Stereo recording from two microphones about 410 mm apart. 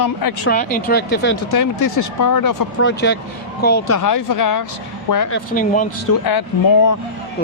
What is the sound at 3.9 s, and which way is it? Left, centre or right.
Speech, left.